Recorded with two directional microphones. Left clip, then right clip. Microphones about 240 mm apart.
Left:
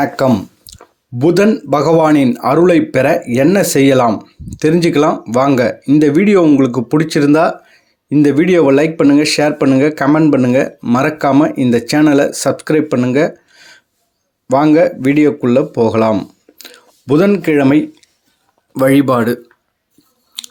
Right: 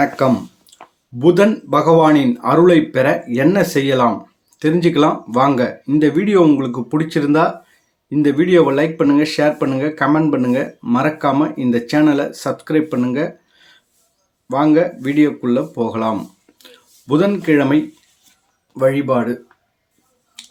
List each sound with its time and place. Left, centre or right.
0.0 s a sound: left
1.2 s speech: left
18.7 s speech: left